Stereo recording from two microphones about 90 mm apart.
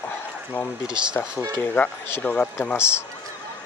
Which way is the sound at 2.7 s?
30° left (ahead or behind).